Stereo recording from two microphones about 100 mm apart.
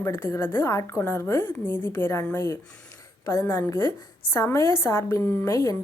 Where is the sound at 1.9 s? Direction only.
25° left (ahead or behind).